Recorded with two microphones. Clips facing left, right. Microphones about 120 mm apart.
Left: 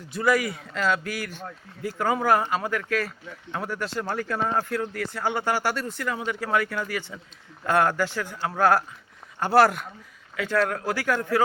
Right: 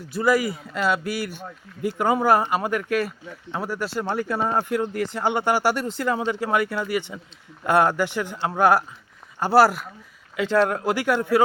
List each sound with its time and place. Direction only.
0.3 s speech: 5° right (ahead or behind)
6.0 s speech: 30° right (ahead or behind)
6.5 s speech: 15° right (ahead or behind)
9.4 s speech: 5° right (ahead or behind)
10.3 s speech: 25° right (ahead or behind)